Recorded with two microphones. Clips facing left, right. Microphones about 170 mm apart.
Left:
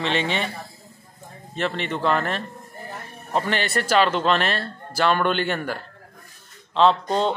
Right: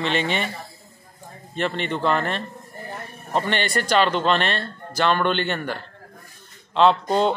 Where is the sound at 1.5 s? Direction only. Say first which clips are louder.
Right 1 dB; centre (ahead or behind).